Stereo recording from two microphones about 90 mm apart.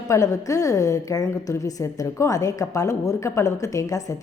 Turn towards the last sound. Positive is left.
turn(degrees=40)  # may be behind; listen again after turning